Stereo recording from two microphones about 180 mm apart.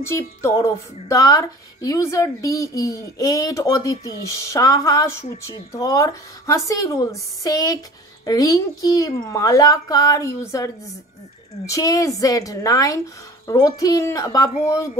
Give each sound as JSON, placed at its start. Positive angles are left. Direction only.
{"t": 0.0, "sound": "speech", "side_deg": 15}